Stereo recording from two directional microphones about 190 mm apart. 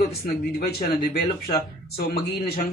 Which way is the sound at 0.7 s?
55° left (ahead or behind).